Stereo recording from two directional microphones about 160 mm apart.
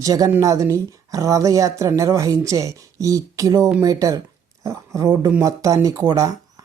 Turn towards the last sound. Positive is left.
turn(degrees=-20)  # may be behind; listen again after turning